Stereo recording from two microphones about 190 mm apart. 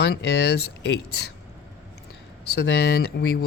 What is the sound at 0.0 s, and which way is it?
Speech, 60° left (ahead or behind).